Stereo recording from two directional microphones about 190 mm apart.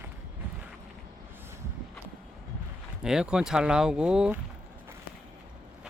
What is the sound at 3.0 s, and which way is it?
Speech, 5° right (ahead or behind).